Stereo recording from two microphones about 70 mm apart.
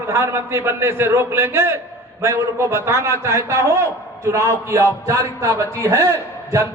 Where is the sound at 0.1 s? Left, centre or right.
Right.